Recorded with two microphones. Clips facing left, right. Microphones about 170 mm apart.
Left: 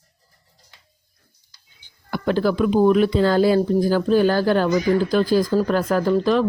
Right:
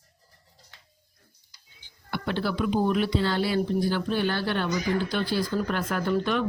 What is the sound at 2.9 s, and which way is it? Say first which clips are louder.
Speech: left 8 dB; 45° left (ahead or behind).